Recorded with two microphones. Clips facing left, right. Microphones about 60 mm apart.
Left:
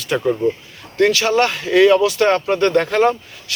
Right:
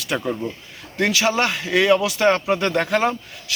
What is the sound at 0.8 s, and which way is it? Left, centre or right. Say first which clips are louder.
Speech: left 4 dB; centre.